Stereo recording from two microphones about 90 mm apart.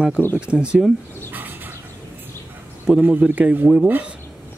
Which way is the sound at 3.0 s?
20° right (ahead or behind).